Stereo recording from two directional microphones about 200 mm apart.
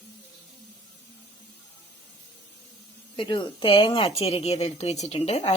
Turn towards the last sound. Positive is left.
turn(degrees=30)  # may be behind; listen again after turning